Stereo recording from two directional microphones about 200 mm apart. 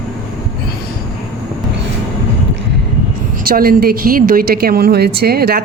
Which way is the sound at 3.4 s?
45° right (ahead or behind).